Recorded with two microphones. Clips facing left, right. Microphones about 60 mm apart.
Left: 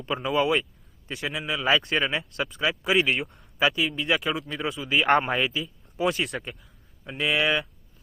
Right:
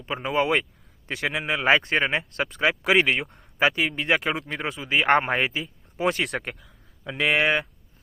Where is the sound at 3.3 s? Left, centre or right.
Right.